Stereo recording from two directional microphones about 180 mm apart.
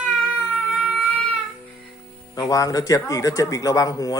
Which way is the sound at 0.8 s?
Centre (ahead or behind).